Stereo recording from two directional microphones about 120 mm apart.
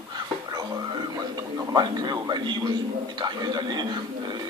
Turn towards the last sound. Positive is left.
turn(degrees=-35)  # may be behind; listen again after turning